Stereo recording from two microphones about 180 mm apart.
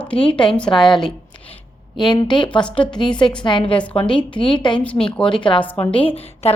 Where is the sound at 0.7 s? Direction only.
Centre (ahead or behind).